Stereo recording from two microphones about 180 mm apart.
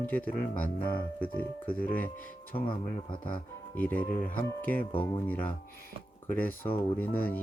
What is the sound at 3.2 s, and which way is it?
Speech, 10° left (ahead or behind).